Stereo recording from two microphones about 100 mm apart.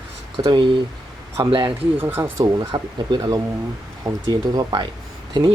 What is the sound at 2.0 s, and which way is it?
Speech, 20° right (ahead or behind).